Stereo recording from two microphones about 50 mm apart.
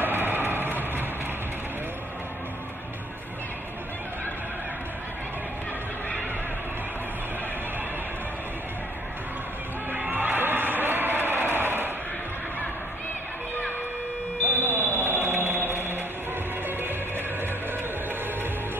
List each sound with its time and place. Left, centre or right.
0.0 s vehicle: right
9.9 s a sound: right
14.5 s fire alarm: right